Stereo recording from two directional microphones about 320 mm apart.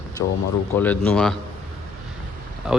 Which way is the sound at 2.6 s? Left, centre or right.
Centre.